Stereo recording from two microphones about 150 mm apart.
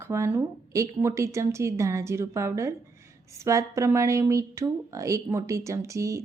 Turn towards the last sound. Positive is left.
turn(degrees=-20)  # may be behind; listen again after turning